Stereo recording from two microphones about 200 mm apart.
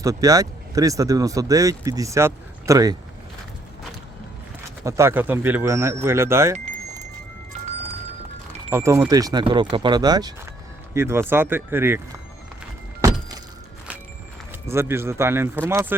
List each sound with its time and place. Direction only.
0.0 s speech: 20° right (ahead or behind)
4.8 s speech: 15° right (ahead or behind)
8.7 s speech: 15° right (ahead or behind)
13.0 s a sound: 15° right (ahead or behind)
14.7 s speech: 10° right (ahead or behind)